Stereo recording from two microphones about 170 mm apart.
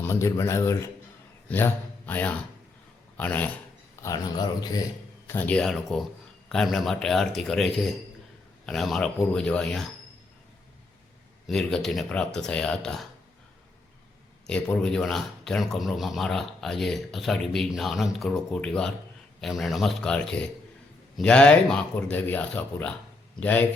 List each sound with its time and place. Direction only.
0.0 s speech: 15° left (ahead or behind)
4.0 s speech: 20° left (ahead or behind)
5.3 s speech: 10° left (ahead or behind)
11.4 s speech: centre (ahead or behind)
14.4 s speech: 5° left (ahead or behind)